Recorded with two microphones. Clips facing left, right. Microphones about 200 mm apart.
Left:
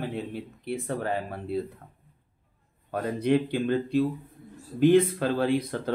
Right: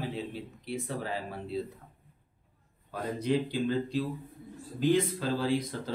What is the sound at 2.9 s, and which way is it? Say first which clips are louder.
Speech: left 5 dB; 60° left (ahead or behind).